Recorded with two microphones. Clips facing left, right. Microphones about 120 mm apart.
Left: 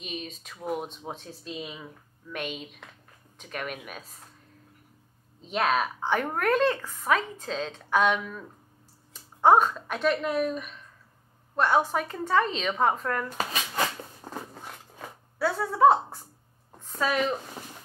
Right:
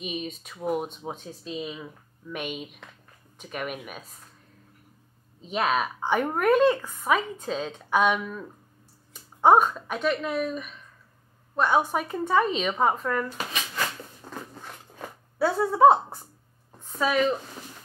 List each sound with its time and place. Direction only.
0.0 s speech: 5° right (ahead or behind)
5.4 s speech: 5° right (ahead or behind)
14.2 s a sound: 45° left (ahead or behind)
15.3 s speech: 15° right (ahead or behind)
17.0 s speech: centre (ahead or behind)